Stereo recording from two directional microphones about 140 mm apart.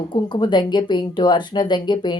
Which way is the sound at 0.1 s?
30° left (ahead or behind).